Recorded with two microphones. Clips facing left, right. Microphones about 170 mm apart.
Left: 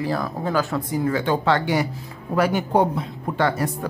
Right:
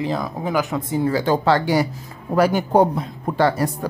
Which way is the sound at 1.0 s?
35° right (ahead or behind).